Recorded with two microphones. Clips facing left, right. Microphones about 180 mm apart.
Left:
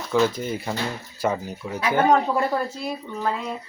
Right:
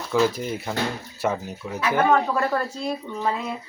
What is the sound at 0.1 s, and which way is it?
Speech, 5° right (ahead or behind).